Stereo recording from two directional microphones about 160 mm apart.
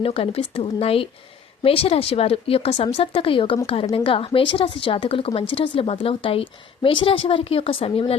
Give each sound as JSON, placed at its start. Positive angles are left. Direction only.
{"t": 0.0, "sound": "speech", "side_deg": 40}